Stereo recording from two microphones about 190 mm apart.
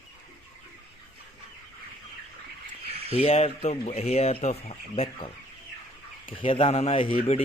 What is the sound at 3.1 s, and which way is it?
A man's voice, 30° left (ahead or behind).